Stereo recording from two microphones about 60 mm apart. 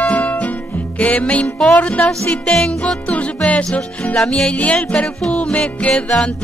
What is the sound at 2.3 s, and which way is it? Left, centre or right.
Music, centre.